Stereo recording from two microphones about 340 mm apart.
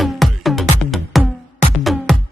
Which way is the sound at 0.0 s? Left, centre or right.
Centre.